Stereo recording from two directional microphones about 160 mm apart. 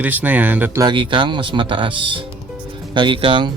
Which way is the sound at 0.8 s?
30° right (ahead or behind).